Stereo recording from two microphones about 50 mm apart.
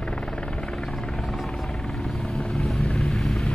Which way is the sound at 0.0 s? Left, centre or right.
Centre.